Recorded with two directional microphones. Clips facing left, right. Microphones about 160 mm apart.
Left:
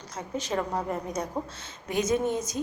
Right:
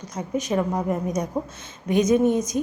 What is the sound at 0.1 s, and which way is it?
A woman's voice, 15° right (ahead or behind).